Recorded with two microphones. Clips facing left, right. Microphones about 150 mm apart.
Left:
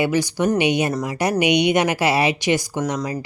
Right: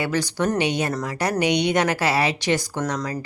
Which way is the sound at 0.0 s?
10° left (ahead or behind).